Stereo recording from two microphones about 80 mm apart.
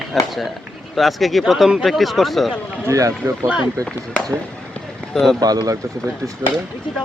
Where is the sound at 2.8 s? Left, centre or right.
Right.